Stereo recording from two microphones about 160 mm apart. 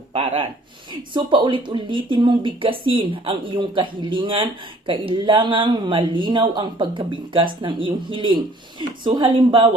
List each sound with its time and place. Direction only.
0.1 s speech: 35° right (ahead or behind)